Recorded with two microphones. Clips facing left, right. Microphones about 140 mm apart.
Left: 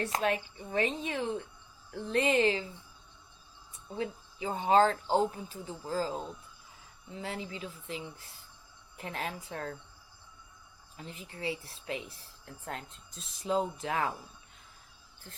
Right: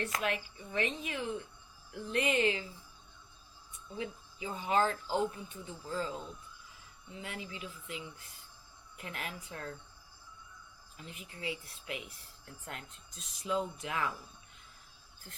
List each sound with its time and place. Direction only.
0.0 s speech: 30° left (ahead or behind)
3.8 s speech: 35° left (ahead or behind)
10.9 s speech: 30° left (ahead or behind)